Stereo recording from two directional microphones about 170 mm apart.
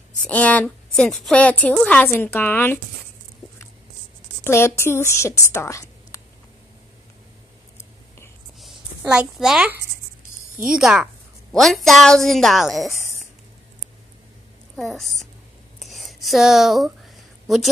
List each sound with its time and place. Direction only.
0.3 s a woman's voice: 10° left (ahead or behind)
4.5 s a woman's voice: 15° left (ahead or behind)
8.5 s a sound: 5° right (ahead or behind)
10.7 s a woman's voice: 5° right (ahead or behind)
14.8 s a woman's voice: centre (ahead or behind)
15.8 s a sound: centre (ahead or behind)